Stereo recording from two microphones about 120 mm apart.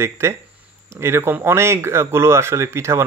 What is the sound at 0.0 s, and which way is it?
Speech, 20° right (ahead or behind).